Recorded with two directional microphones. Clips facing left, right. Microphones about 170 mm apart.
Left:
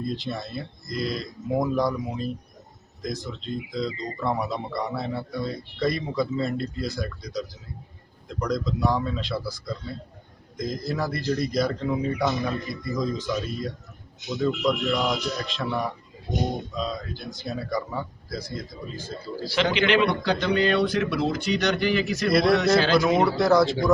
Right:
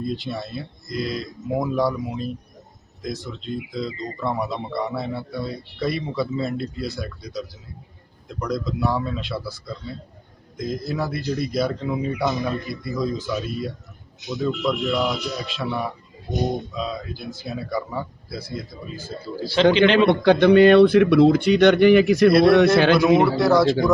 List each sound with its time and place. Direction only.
0.0 s a man's voice: centre (ahead or behind)
10.6 s a man's voice: 5° right (ahead or behind)
19.6 s a man's voice: 35° right (ahead or behind)
20.1 s speech: 55° right (ahead or behind)
23.0 s a man's voice: centre (ahead or behind)